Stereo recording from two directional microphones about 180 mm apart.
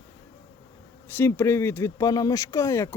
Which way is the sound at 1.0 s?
10° left (ahead or behind).